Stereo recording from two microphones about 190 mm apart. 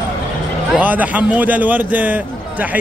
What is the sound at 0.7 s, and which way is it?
A man's voice, 10° right (ahead or behind).